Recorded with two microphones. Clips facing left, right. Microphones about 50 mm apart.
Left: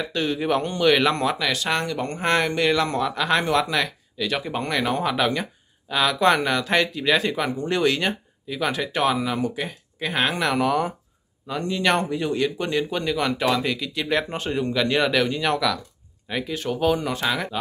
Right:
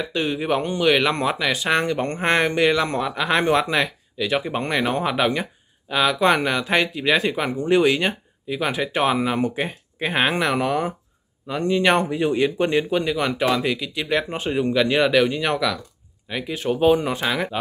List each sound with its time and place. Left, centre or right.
0.0 s speech: centre
1.1 s speech: right
2.0 s speech: right
2.2 s speech: right
3.4 s speech: right
3.7 s speech: centre
10.6 s speech: centre
11.6 s speech: right
12.9 s speech: centre